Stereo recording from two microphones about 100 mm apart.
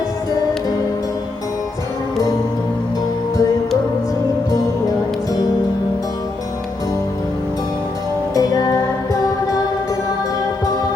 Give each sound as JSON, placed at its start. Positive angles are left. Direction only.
{"t": 4.5, "sound": "music", "side_deg": 40}
{"t": 8.4, "sound": "music", "side_deg": 40}